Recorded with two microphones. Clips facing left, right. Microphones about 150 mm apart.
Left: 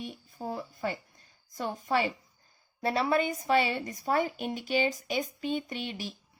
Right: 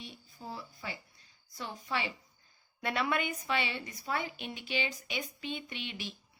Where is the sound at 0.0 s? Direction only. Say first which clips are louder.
Left 8 dB; 50° left (ahead or behind).